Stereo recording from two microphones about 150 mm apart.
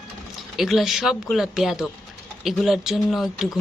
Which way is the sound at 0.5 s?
Centre (ahead or behind).